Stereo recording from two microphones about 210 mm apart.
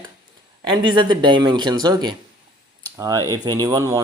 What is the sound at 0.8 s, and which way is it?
Speech, 20° right (ahead or behind).